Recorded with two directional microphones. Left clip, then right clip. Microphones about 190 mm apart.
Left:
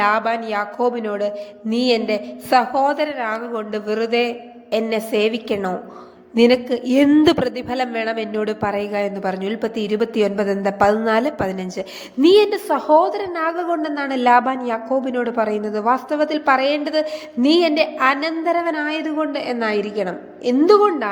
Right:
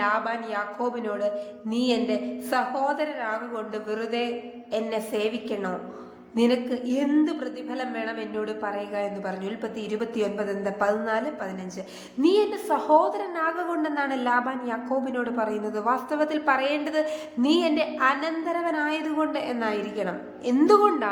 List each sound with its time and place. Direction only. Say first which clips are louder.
0.0 s a woman's voice: left 8 dB; 30° left (ahead or behind)